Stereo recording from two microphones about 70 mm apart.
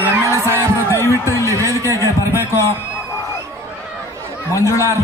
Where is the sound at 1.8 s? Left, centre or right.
Left.